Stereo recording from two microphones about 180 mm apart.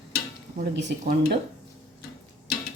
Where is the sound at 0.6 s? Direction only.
75° right (ahead or behind).